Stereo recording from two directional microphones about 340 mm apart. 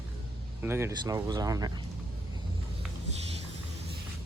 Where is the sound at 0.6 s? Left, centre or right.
Centre.